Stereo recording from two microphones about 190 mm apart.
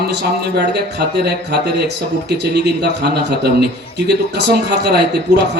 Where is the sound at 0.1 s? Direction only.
65° right (ahead or behind).